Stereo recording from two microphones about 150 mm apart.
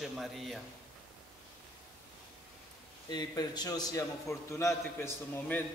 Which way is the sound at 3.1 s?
25° left (ahead or behind).